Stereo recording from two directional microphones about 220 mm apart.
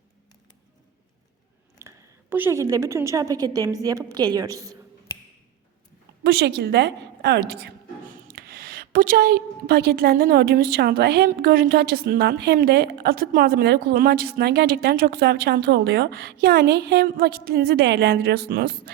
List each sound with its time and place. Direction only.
1.8 s a woman's voice: 10° right (ahead or behind)
6.2 s a woman's voice: 45° right (ahead or behind)